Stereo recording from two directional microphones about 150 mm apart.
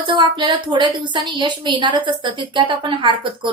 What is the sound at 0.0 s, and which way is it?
A woman's voice, 30° right (ahead or behind).